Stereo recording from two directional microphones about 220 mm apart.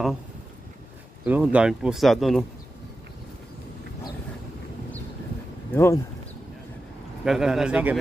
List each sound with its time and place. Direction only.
1.2 s speech: 5° right (ahead or behind)
5.7 s speech: 10° left (ahead or behind)
7.2 s speech: centre (ahead or behind)